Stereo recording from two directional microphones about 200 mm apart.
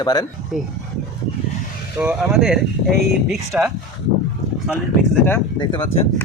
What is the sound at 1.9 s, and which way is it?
Speech, 5° right (ahead or behind).